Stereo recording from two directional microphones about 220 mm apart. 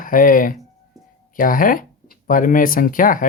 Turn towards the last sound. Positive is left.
turn(degrees=40)  # may be behind; listen again after turning